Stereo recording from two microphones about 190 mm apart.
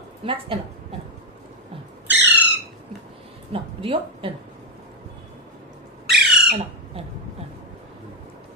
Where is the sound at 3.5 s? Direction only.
30° right (ahead or behind).